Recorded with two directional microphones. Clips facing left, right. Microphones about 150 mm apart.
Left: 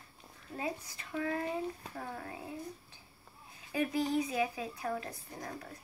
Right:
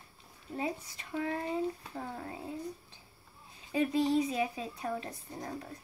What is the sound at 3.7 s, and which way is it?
Speech, 25° right (ahead or behind).